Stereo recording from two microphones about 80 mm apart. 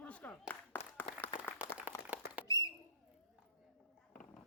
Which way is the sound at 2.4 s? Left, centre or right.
Left.